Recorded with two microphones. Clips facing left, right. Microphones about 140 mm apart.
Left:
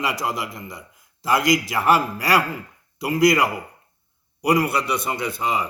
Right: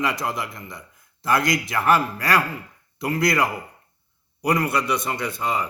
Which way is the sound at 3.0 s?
20° left (ahead or behind).